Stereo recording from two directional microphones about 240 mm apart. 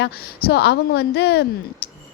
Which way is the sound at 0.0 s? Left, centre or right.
Left.